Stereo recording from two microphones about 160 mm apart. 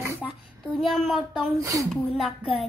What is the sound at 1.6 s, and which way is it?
Speech, 20° right (ahead or behind).